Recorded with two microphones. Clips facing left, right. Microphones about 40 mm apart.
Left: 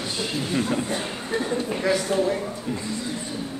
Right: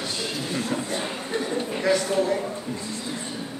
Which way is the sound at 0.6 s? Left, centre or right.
Centre.